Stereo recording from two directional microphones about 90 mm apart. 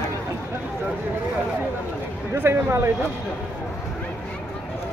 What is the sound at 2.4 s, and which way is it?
Speech, 25° right (ahead or behind).